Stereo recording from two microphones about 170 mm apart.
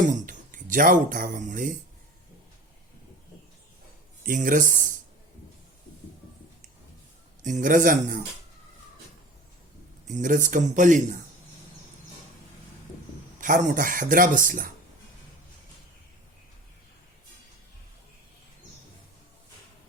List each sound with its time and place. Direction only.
0.1 s speech: 50° right (ahead or behind)
4.3 s speech: 50° right (ahead or behind)
7.4 s speech: 50° right (ahead or behind)
10.1 s speech: 50° right (ahead or behind)
13.4 s speech: 50° right (ahead or behind)